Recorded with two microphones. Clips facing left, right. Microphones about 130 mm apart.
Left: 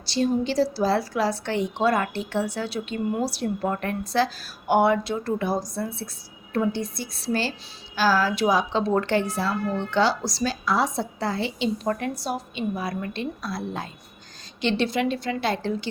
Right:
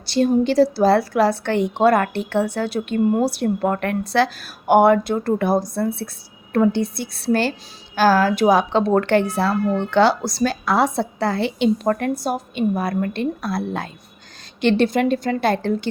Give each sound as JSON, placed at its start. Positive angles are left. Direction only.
{"t": 0.0, "sound": "a woman's voice", "side_deg": -55}
{"t": 14.6, "sound": "a woman's voice", "side_deg": -55}